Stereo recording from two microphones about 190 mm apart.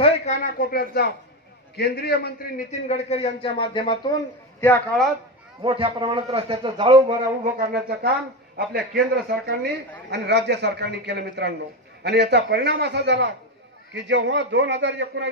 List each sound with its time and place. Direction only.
0.0 s a man's voice: 35° left (ahead or behind); by 2.6 s 55° left (ahead or behind)
2.7 s a man's voice: 35° left (ahead or behind)
4.6 s a man's voice: centre (ahead or behind)
5.6 s a man's voice: 30° right (ahead or behind)
7.5 s a man's voice: 55° right (ahead or behind); by 15.2 s 70° right (ahead or behind)